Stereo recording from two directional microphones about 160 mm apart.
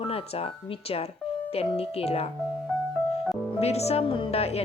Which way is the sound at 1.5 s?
40° left (ahead or behind).